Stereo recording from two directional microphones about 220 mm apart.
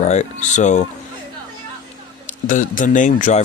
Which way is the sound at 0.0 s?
30° left (ahead or behind).